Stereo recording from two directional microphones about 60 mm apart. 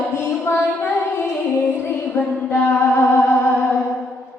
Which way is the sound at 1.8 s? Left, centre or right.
Left.